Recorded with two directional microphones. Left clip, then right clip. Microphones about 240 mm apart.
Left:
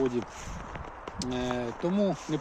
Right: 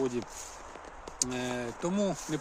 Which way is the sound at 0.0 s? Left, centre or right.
Centre.